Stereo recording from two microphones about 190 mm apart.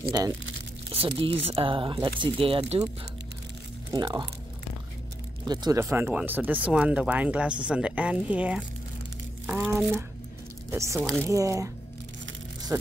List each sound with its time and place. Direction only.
0.8 s speech: 30° right (ahead or behind)
3.9 s speech: 20° right (ahead or behind)
5.4 s a woman's voice: 20° right (ahead or behind)
11.0 s speech: 5° left (ahead or behind)
11.2 s speech: 15° right (ahead or behind)